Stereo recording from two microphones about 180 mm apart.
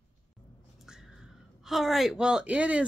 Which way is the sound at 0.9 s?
Centre (ahead or behind).